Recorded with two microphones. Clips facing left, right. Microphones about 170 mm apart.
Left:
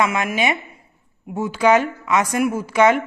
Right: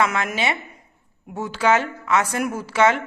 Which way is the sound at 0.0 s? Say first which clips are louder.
Left 2 dB; 10° left (ahead or behind).